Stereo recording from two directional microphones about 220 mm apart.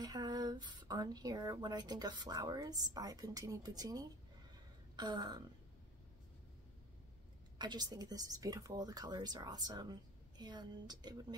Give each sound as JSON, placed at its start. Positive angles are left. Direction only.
{"t": 0.0, "sound": "a woman's voice", "side_deg": -20}
{"t": 7.5, "sound": "speech", "side_deg": -20}